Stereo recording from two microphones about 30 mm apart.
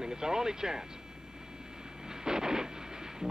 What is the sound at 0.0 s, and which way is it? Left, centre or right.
Speech, right.